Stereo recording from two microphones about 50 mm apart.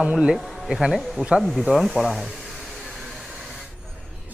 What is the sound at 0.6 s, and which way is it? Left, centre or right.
Hair dryer, centre.